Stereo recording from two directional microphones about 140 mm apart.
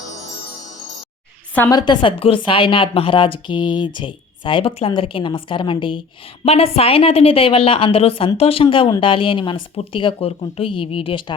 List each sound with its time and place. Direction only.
1.7 s a woman's voice: 30° left (ahead or behind)